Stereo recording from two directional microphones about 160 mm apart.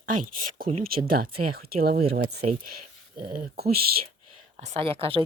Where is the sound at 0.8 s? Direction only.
65° right (ahead or behind).